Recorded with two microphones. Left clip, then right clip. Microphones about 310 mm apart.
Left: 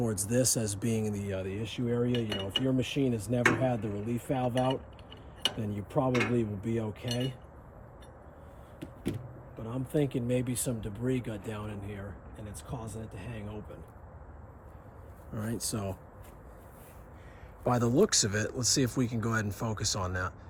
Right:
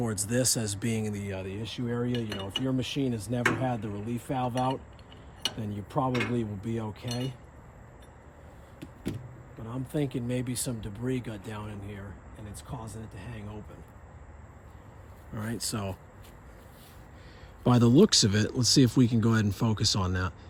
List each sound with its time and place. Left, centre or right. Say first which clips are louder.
0.3 s speech: right 1 dB; centre
8.8 s a sound: left 1 dB; centre
9.6 s speech: left 2 dB; centre
15.7 s speech: right 1 dB; centre
17.6 s speech: right 4 dB; right